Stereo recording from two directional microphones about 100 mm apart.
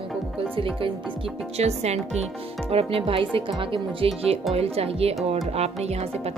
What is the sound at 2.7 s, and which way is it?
Speech, 70° right (ahead or behind).